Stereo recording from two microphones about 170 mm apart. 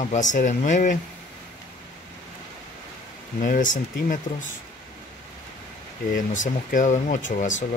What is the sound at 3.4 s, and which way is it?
Speech, 50° left (ahead or behind).